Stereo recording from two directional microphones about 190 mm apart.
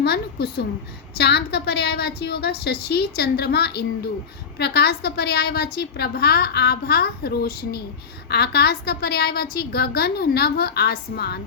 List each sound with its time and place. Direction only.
0.0 s a woman's voice: 55° left (ahead or behind)